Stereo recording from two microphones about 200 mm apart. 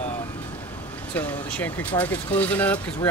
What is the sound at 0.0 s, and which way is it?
Vehicle, 10° left (ahead or behind).